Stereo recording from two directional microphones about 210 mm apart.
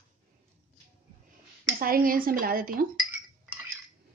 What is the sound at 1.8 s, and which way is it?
Speech, 40° right (ahead or behind).